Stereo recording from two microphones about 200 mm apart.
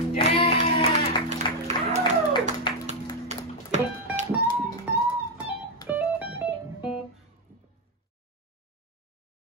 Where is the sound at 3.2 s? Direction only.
35° right (ahead or behind).